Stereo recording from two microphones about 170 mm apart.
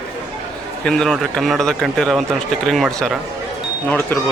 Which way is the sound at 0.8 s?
5° left (ahead or behind).